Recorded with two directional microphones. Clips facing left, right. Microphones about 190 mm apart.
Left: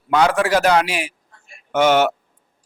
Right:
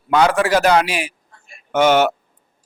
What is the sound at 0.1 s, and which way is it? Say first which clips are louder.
A man's voice: right 1 dB; 5° right (ahead or behind).